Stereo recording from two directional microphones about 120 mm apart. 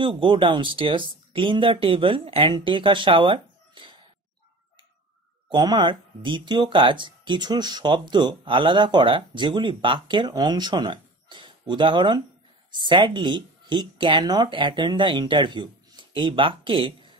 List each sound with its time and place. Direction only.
0.0 s speech: 45° right (ahead or behind)
5.5 s speech: 40° right (ahead or behind)